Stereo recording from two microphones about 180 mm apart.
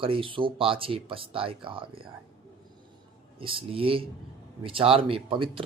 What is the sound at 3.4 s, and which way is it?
Speech, 30° right (ahead or behind).